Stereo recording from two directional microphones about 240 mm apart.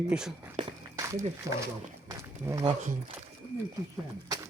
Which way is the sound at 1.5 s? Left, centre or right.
Centre.